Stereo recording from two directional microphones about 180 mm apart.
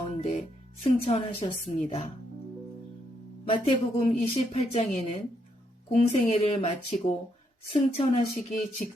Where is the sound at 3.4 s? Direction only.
35° left (ahead or behind).